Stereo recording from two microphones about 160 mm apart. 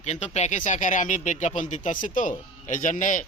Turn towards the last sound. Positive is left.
turn(degrees=55)  # may be behind; listen again after turning